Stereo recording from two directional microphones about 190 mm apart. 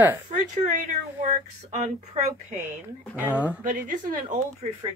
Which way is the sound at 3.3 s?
10° right (ahead or behind).